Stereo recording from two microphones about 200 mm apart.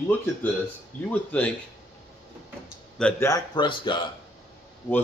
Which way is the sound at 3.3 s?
20° left (ahead or behind).